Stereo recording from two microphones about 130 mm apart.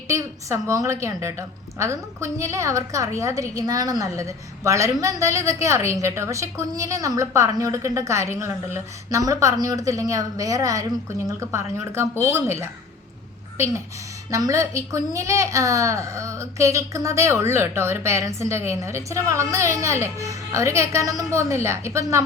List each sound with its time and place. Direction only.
0.1 s a woman's voice: 25° right (ahead or behind)